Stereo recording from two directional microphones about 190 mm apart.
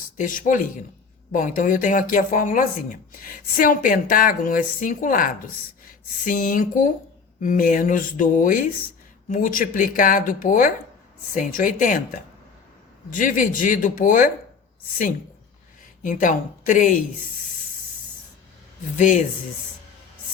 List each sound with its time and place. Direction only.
0.2 s speech: 45° left (ahead or behind)
16.0 s speech: 40° left (ahead or behind)
18.9 s speech: 40° left (ahead or behind)